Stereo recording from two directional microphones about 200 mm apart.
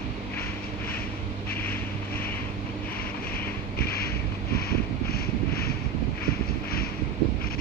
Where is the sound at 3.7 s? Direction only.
50° left (ahead or behind).